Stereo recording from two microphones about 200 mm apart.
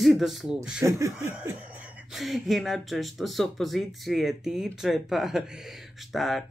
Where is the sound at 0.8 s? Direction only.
15° right (ahead or behind).